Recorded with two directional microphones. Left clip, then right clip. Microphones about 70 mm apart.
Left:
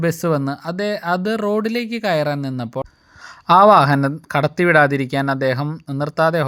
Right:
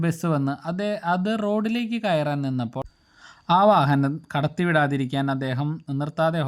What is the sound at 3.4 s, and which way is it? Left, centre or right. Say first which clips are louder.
Speech: left 7 dB; left.